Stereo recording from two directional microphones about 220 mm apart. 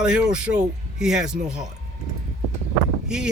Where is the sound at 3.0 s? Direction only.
5° right (ahead or behind).